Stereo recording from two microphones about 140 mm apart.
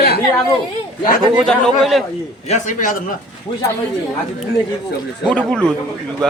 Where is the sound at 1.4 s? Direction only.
Centre (ahead or behind).